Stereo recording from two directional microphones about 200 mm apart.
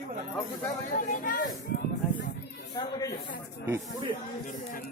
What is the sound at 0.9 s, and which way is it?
Speech, 40° left (ahead or behind).